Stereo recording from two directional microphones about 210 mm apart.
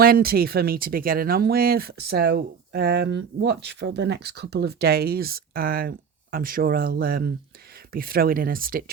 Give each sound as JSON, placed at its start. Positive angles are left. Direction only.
{"t": 0.0, "sound": "speech", "side_deg": -45}